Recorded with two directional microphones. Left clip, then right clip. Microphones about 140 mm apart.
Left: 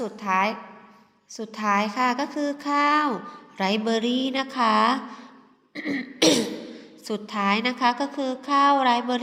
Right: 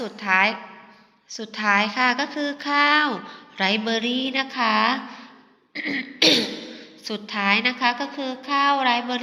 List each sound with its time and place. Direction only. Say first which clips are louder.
0.0 s a woman's voice: right 3 dB; 20° left (ahead or behind); by 5.2 s 40° left (ahead or behind)
5.7 s throat clearing: right 3 dB; 45° left (ahead or behind)
7.0 s a woman's voice: right 1 dB; 35° left (ahead or behind)